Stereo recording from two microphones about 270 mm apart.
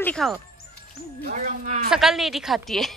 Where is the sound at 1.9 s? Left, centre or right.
Centre.